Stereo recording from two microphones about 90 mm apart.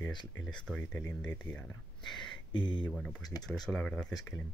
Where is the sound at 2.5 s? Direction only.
65° left (ahead or behind).